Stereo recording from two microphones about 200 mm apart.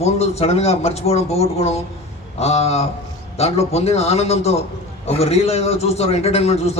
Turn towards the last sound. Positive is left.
turn(degrees=30)  # may be behind; listen again after turning